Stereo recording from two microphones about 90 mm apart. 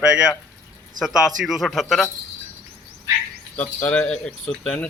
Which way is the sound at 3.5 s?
15° left (ahead or behind).